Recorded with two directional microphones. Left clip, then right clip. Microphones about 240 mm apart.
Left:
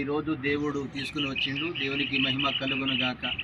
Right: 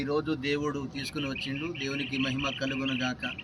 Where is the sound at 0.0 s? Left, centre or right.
Right.